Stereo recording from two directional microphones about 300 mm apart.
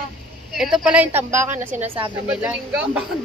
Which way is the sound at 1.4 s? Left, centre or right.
Right.